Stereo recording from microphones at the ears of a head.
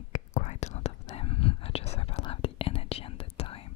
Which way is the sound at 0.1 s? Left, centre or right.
Left.